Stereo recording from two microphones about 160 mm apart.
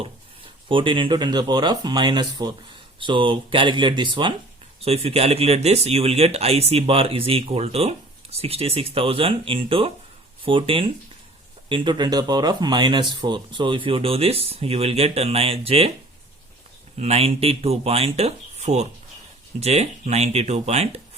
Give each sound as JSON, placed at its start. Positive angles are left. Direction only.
{"t": 0.7, "sound": "speech", "side_deg": -30}
{"t": 4.9, "sound": "speech", "side_deg": -40}
{"t": 17.0, "sound": "speech", "side_deg": -40}